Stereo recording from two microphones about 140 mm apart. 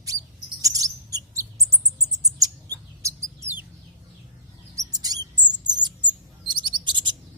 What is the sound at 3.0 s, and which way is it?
Mouse, 20° right (ahead or behind).